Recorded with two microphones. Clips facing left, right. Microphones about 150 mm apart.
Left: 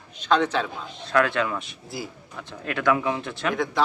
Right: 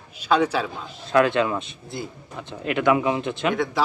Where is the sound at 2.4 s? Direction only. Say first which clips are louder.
Right 5 dB; 20° right (ahead or behind).